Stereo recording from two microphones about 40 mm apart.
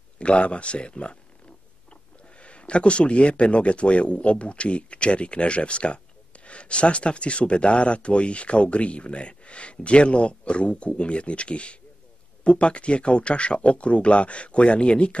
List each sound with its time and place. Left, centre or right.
0.2 s speech: left
2.3 s speech: left